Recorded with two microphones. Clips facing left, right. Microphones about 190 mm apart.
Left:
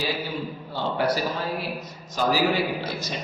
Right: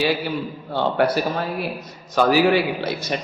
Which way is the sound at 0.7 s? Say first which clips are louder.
Right 8 dB; 65° right (ahead or behind).